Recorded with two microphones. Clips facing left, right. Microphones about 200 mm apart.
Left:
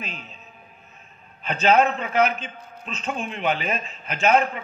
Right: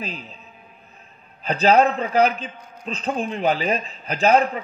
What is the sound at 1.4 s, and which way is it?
A man's voice, 35° right (ahead or behind).